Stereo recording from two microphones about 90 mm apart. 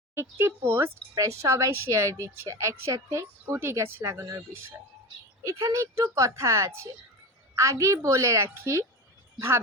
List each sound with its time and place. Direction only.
0.2 s speech: 30° right (ahead or behind)
1.1 s a woman's voice: 35° right (ahead or behind)